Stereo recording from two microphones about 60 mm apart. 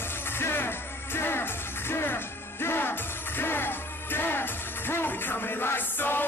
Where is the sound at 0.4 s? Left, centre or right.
Left.